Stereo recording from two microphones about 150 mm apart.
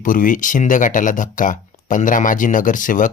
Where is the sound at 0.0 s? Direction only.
65° left (ahead or behind).